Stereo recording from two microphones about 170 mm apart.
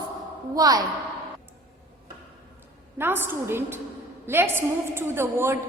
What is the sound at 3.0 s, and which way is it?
A woman's voice, 10° right (ahead or behind).